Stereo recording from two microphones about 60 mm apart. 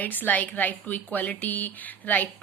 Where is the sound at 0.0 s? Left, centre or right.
Left.